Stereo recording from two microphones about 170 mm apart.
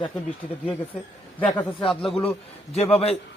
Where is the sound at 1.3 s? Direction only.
10° left (ahead or behind).